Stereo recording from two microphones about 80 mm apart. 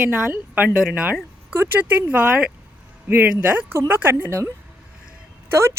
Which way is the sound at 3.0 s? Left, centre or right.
Right.